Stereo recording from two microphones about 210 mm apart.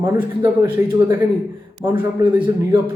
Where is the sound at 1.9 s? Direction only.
25° right (ahead or behind).